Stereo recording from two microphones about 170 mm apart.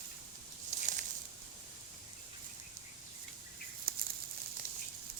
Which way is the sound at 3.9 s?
60° right (ahead or behind).